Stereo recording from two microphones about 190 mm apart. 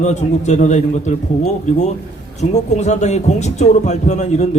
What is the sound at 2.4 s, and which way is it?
A man's voice, 35° left (ahead or behind).